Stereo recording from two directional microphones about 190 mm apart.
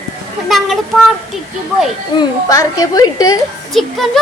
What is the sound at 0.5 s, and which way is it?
Speech, centre (ahead or behind).